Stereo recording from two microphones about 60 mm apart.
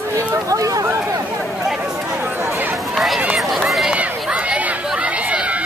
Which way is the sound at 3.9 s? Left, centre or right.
Right.